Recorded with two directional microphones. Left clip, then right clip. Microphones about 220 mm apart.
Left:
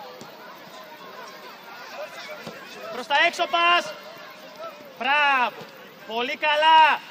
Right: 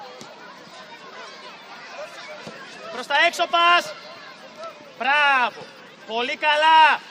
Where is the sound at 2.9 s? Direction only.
15° right (ahead or behind).